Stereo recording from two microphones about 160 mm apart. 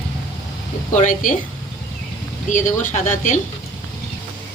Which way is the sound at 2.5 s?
50° left (ahead or behind).